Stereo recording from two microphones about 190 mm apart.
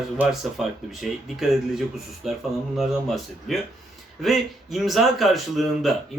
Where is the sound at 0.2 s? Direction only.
Centre (ahead or behind).